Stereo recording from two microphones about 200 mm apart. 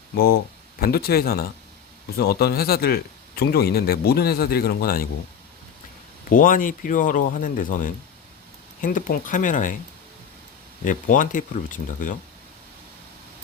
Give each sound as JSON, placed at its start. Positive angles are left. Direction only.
{"t": 0.8, "sound": "speech", "side_deg": 50}
{"t": 6.3, "sound": "speech", "side_deg": 45}
{"t": 10.8, "sound": "speech", "side_deg": 40}